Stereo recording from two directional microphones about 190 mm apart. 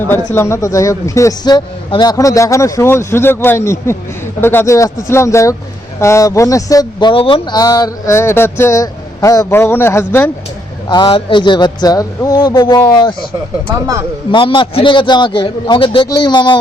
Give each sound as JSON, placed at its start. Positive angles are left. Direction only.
{"t": 0.3, "sound": "speech", "side_deg": 15}
{"t": 10.8, "sound": "speech", "side_deg": 25}
{"t": 14.3, "sound": "speech", "side_deg": 25}